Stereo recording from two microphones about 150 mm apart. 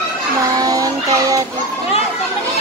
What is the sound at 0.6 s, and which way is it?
Child singing, 25° right (ahead or behind).